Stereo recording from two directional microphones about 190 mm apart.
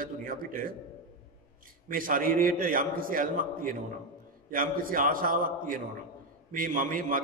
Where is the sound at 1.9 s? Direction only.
45° right (ahead or behind).